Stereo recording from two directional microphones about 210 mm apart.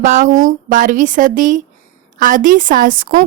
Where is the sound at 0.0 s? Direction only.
40° right (ahead or behind).